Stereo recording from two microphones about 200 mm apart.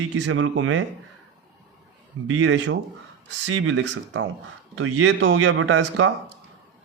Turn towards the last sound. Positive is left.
turn(degrees=-70)  # may be behind; listen again after turning